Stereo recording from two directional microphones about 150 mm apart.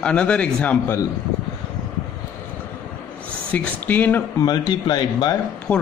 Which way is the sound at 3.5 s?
10° left (ahead or behind).